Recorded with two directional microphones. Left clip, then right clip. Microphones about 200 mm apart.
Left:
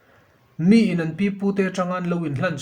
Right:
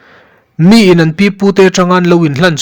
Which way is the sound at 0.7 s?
50° right (ahead or behind).